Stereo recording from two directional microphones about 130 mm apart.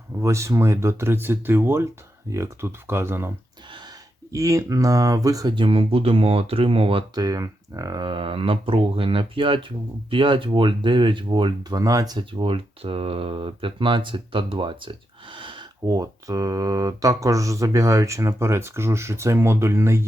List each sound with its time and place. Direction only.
0.2 s speech: 20° right (ahead or behind); by 7.0 s 45° right (ahead or behind)
7.2 s speech: 30° right (ahead or behind)
11.8 s speech: 25° right (ahead or behind)
12.5 s speech: 45° right (ahead or behind); by 20.1 s 20° right (ahead or behind)